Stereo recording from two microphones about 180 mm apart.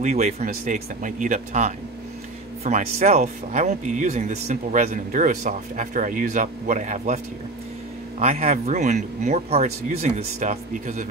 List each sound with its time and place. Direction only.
0.0 s speech: 40° right (ahead or behind)
8.2 s speech: 35° right (ahead or behind)